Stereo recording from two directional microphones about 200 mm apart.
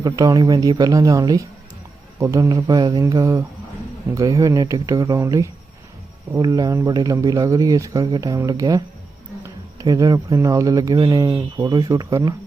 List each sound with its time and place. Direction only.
0.0 s speech: 20° right (ahead or behind)